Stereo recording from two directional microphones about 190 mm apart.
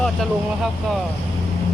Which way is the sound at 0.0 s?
Centre (ahead or behind).